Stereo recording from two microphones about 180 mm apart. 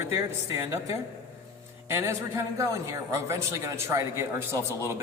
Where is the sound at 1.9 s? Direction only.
15° right (ahead or behind).